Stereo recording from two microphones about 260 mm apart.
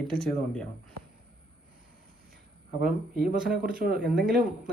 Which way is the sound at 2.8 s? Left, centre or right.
Right.